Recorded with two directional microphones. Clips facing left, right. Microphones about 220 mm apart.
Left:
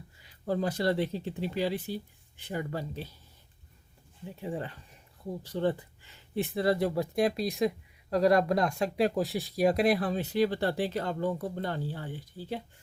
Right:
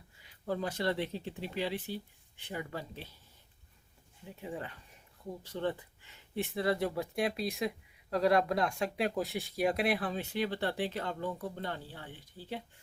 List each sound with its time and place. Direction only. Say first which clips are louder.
0.4 s speech: left 5 dB; 35° left (ahead or behind)
4.4 s speech: left 5 dB; 35° left (ahead or behind)